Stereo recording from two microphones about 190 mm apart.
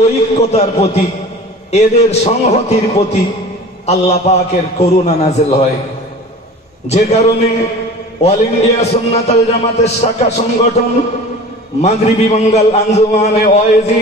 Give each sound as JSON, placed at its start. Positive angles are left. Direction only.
{"t": 0.0, "sound": "a man's voice", "side_deg": 35}
{"t": 6.9, "sound": "a man's voice", "side_deg": 35}
{"t": 11.8, "sound": "a man's voice", "side_deg": 35}